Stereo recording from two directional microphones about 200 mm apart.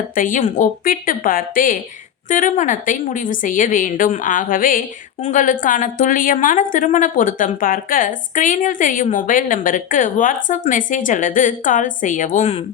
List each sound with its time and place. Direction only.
0.2 s a woman's voice: 40° left (ahead or behind)